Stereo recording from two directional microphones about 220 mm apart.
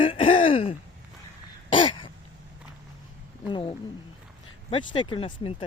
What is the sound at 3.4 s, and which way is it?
Speech, 20° left (ahead or behind).